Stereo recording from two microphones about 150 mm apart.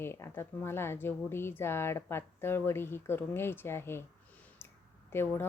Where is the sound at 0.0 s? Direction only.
15° left (ahead or behind).